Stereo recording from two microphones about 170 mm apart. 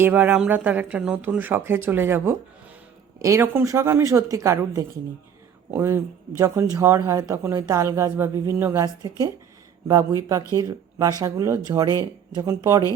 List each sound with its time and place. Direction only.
0.0 s speech: 10° right (ahead or behind)